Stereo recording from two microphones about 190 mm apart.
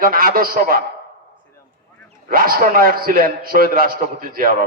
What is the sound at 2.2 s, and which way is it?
A man's voice, 50° right (ahead or behind).